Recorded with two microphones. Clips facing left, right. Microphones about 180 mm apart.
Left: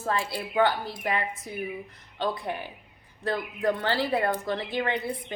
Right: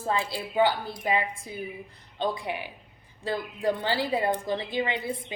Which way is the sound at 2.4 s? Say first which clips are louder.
Even; 15° right (ahead or behind).